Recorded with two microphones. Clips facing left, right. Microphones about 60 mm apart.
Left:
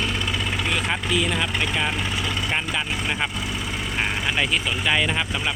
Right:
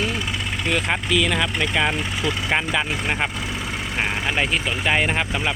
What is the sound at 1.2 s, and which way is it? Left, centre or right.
Speech, right.